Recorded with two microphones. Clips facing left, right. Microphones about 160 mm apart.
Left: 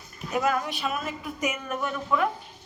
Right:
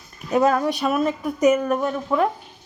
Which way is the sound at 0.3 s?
35° right (ahead or behind).